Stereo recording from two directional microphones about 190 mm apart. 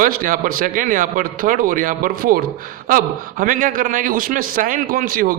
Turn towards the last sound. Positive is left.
turn(degrees=-50)  # may be behind; listen again after turning